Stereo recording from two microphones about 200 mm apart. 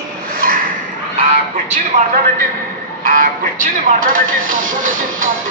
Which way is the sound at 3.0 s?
45° right (ahead or behind).